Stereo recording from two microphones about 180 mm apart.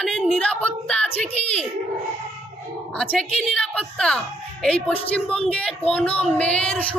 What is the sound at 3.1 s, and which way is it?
A man's voice, 5° left (ahead or behind).